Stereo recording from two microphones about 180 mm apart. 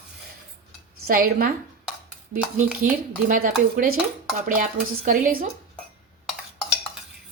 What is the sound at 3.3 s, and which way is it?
A woman's voice, 50° right (ahead or behind).